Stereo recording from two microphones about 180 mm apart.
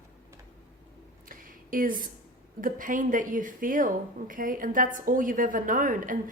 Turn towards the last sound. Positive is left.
turn(degrees=-50)  # may be behind; listen again after turning